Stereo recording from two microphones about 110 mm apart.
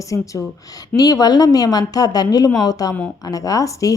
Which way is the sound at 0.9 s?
35° left (ahead or behind).